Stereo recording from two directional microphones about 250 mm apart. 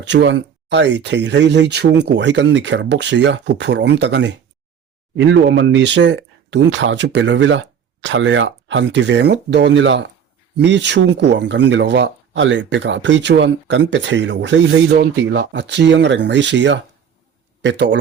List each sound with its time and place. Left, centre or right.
0.0 s speech: right